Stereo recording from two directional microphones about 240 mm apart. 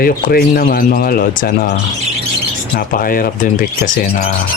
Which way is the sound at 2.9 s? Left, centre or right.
Left.